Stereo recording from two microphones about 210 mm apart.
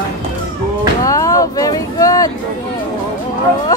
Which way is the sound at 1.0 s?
15° left (ahead or behind).